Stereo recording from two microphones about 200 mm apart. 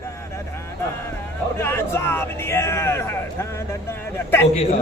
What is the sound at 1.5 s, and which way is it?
Speech, 10° left (ahead or behind).